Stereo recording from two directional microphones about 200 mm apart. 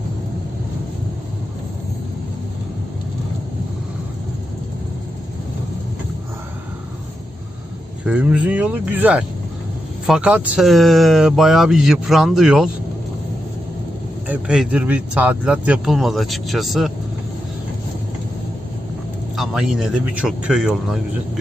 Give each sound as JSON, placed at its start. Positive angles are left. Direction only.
{"t": 8.0, "sound": "speech", "side_deg": -5}
{"t": 14.3, "sound": "speech", "side_deg": -5}
{"t": 19.4, "sound": "speech", "side_deg": 0}